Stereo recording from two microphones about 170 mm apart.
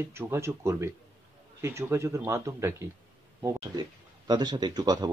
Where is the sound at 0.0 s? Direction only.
15° right (ahead or behind).